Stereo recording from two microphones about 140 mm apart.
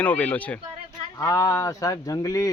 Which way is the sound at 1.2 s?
20° left (ahead or behind).